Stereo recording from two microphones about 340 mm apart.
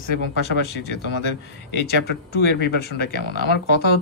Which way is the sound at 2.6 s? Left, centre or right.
Left.